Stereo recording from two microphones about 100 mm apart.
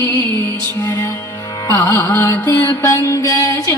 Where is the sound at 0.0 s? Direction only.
20° left (ahead or behind).